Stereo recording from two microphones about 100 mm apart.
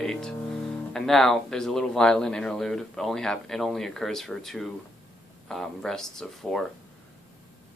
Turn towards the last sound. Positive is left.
turn(degrees=5)  # may be behind; listen again after turning